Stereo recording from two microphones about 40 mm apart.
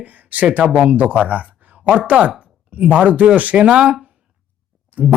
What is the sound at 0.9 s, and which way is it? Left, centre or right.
Speech, right.